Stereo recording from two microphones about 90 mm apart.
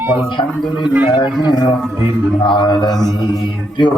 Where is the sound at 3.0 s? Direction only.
50° left (ahead or behind).